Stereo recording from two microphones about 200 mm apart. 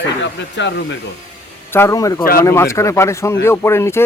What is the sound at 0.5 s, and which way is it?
Speech, 60° left (ahead or behind).